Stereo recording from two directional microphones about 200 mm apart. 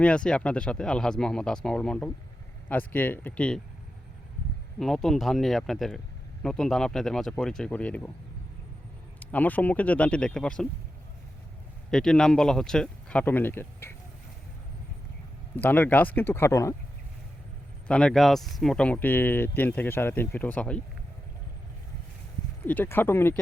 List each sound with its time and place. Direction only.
0.0 s speech: 5° left (ahead or behind)
4.8 s speech: centre (ahead or behind)
9.2 s speech: 10° left (ahead or behind)
11.9 s speech: 5° left (ahead or behind)
15.5 s speech: 10° left (ahead or behind)
17.8 s speech: 5° left (ahead or behind)
22.6 s speech: 10° left (ahead or behind)